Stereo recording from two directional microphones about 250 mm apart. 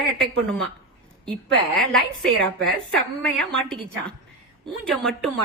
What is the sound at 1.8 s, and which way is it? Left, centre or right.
A woman's voice, centre.